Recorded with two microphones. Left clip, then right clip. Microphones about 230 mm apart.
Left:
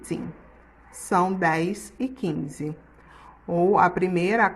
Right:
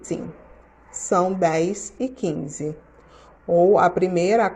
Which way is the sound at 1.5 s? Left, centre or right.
Centre.